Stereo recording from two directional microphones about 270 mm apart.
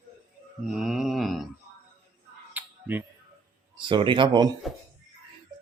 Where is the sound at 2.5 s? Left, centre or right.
Centre.